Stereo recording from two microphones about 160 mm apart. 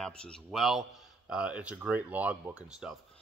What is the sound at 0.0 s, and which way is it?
A man's voice, 5° left (ahead or behind).